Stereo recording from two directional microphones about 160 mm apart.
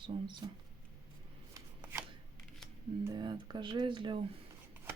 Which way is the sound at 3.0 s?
25° right (ahead or behind).